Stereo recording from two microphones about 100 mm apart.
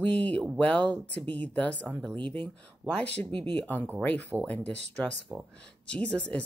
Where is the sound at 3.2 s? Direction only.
50° right (ahead or behind).